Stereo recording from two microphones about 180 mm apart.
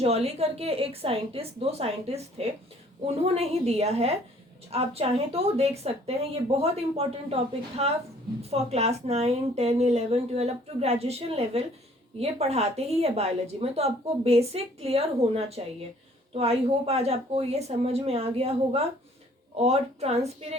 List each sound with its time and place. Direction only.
0.0 s a woman's voice: 35° right (ahead or behind)